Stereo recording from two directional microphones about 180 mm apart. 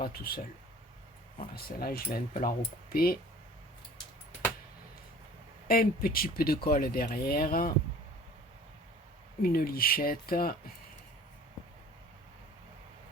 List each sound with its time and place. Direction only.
0.0 s speech: 55° left (ahead or behind)
1.5 s speech: 55° left (ahead or behind)
5.6 s speech: 55° left (ahead or behind)
9.4 s speech: 55° left (ahead or behind)